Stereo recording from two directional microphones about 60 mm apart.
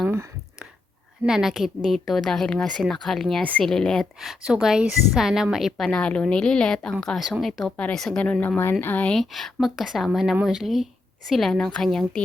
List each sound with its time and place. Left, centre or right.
1.3 s speech: centre
4.2 s speech: centre
5.9 s speech: centre
8.2 s speech: left
9.1 s speech: centre